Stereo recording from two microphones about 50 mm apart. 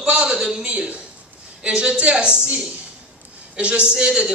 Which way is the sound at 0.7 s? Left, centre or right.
Right.